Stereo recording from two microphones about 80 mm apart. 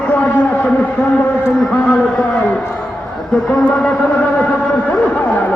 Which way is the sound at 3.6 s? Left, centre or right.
Centre.